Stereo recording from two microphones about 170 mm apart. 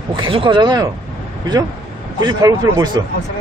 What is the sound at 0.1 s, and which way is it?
Speech, 30° right (ahead or behind).